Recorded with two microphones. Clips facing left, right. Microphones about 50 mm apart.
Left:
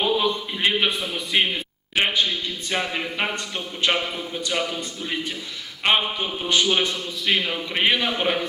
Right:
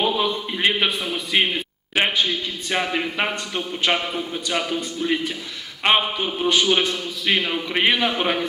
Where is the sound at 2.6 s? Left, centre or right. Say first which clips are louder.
Right 3 dB; centre.